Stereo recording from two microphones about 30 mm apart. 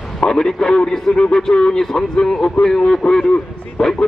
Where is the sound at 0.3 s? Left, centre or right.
Left.